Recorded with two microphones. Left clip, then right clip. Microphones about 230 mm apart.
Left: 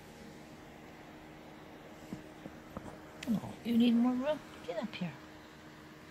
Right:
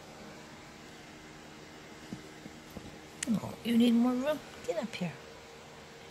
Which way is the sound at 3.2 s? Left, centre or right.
Right.